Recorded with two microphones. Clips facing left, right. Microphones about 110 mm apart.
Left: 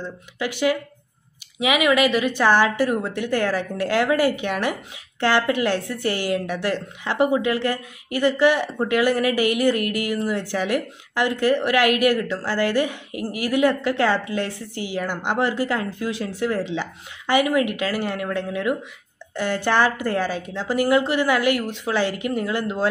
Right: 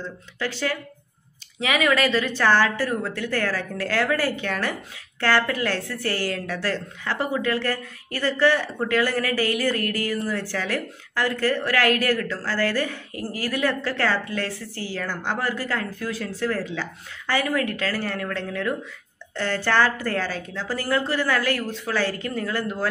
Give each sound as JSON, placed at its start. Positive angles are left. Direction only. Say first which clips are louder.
{"t": 0.0, "sound": "a woman's voice", "louder": "left 2 dB", "side_deg": 15}